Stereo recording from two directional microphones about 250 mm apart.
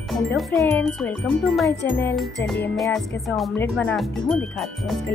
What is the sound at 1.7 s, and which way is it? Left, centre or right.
Speech, centre.